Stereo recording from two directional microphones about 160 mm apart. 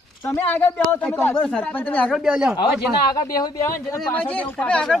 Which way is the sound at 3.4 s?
20° left (ahead or behind).